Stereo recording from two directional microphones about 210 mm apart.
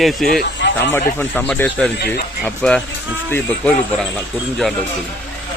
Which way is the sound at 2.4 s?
5° left (ahead or behind).